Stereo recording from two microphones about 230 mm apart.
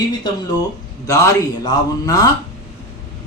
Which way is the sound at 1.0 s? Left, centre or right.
Centre.